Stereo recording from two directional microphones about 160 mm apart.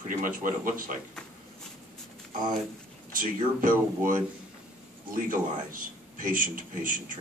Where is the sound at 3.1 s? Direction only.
55° right (ahead or behind).